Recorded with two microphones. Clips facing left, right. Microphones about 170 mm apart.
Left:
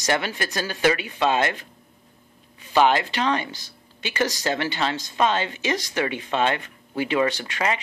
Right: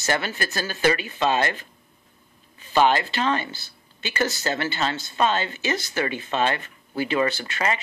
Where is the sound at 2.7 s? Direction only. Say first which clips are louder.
Left 1 dB; 15° left (ahead or behind).